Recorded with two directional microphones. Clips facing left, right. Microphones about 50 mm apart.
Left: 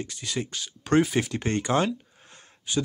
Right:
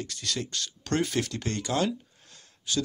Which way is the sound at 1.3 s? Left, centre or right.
Left.